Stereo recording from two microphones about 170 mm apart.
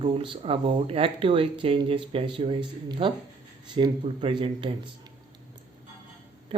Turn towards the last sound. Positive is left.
turn(degrees=-30)  # may be behind; listen again after turning